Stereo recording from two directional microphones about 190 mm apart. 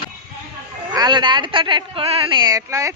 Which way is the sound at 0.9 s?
20° right (ahead or behind).